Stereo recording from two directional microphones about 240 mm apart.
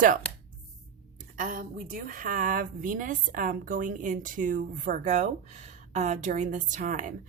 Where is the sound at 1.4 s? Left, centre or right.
Right.